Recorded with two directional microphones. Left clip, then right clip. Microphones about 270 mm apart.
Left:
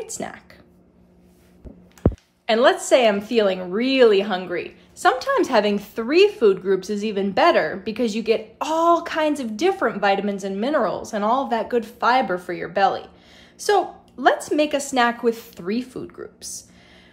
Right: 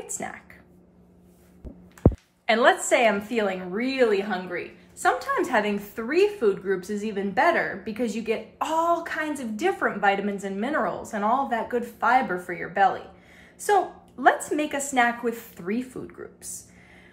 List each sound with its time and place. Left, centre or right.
0.2 s a woman's voice: centre
2.0 s a sound: right
2.4 s a woman's voice: centre